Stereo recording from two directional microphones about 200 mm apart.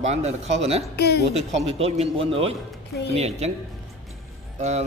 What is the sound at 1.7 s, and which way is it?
A man's voice, 30° right (ahead or behind).